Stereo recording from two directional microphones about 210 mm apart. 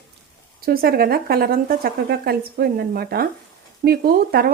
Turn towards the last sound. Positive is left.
turn(degrees=-45)  # may be behind; listen again after turning